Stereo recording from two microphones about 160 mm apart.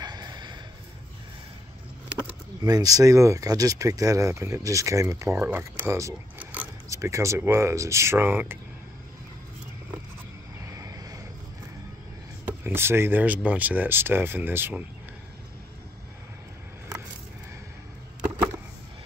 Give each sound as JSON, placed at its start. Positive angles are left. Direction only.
{"t": 0.0, "sound": "a sound", "side_deg": -25}
{"t": 2.6, "sound": "speech", "side_deg": -25}
{"t": 5.9, "sound": "mechanisms", "side_deg": -20}
{"t": 6.9, "sound": "speech", "side_deg": -20}
{"t": 10.6, "sound": "vehicle", "side_deg": -20}
{"t": 12.4, "sound": "speech", "side_deg": -15}